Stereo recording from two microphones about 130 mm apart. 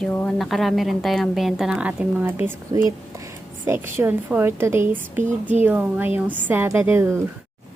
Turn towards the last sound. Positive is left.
turn(degrees=-20)  # may be behind; listen again after turning